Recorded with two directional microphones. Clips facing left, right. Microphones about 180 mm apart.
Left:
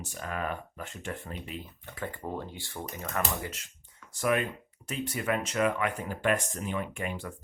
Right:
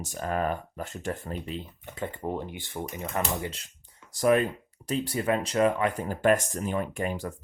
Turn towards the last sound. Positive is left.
turn(degrees=-40)  # may be behind; listen again after turning